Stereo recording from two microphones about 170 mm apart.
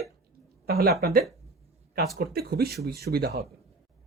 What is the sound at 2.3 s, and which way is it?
Speech, 65° right (ahead or behind).